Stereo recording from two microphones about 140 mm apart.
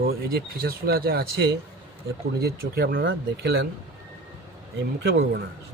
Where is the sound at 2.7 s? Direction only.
90° right.